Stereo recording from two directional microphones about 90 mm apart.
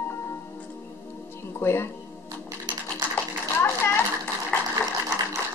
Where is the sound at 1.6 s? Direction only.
25° left (ahead or behind).